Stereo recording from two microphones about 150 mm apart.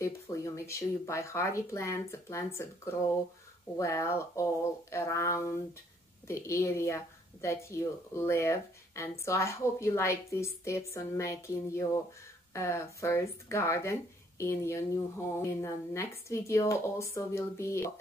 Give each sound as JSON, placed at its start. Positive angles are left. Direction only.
{"t": 0.0, "sound": "speech", "side_deg": 20}